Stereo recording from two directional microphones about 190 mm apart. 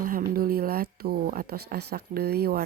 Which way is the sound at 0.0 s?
50° right (ahead or behind).